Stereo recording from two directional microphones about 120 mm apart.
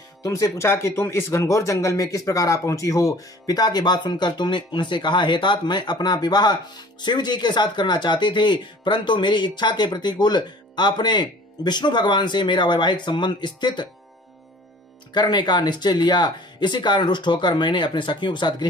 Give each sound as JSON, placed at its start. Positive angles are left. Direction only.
{"t": 0.2, "sound": "speech", "side_deg": 25}
{"t": 15.1, "sound": "speech", "side_deg": 40}